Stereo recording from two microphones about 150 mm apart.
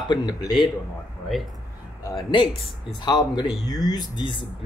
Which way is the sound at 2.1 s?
30° left (ahead or behind).